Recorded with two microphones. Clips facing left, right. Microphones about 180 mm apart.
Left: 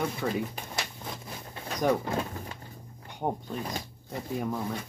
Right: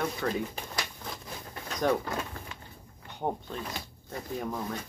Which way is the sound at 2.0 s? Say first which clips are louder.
Left 4 dB; 25° left (ahead or behind).